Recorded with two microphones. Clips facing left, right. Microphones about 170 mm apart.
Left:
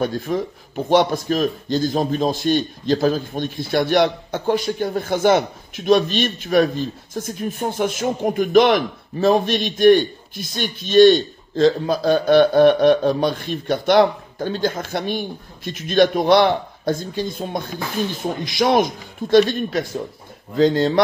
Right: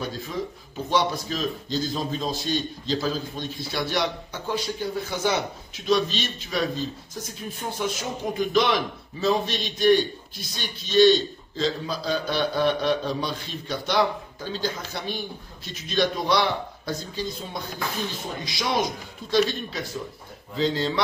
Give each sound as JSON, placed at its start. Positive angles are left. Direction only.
{"t": 0.0, "sound": "a man's voice", "side_deg": 55}
{"t": 20.5, "sound": "a man's voice", "side_deg": 50}